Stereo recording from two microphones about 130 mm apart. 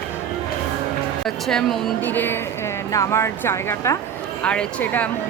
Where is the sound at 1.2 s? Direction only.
5° left (ahead or behind).